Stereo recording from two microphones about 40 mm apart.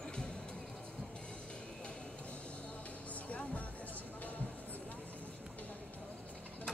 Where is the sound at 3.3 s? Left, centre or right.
Left.